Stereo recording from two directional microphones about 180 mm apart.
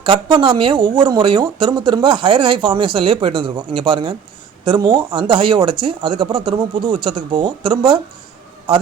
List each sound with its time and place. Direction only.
0.0 s speech: 25° right (ahead or behind)